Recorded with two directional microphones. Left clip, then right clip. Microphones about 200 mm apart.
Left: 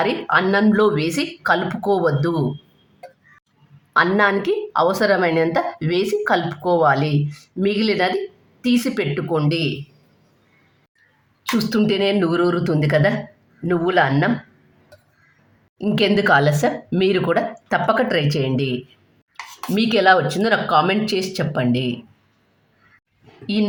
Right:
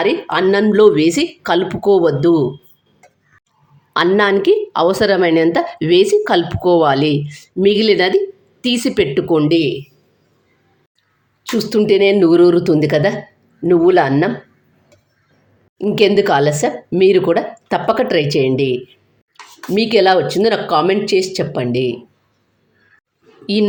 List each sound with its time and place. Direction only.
0.0 s a woman's voice: 15° right (ahead or behind)
3.9 s a woman's voice: 15° right (ahead or behind)
11.5 s a woman's voice: 15° right (ahead or behind)
16.0 s a woman's voice: 10° right (ahead or behind)